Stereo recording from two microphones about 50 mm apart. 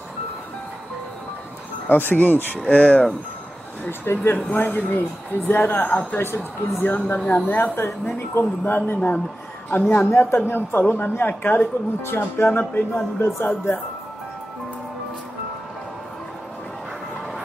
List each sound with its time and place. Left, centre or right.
1.9 s speech: left
4.0 s speech: left
9.7 s speech: left
10.1 s speech: left
11.6 s speech: left
12.4 s speech: left